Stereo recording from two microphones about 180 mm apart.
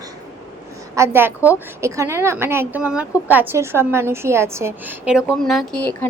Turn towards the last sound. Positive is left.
turn(degrees=10)  # may be behind; listen again after turning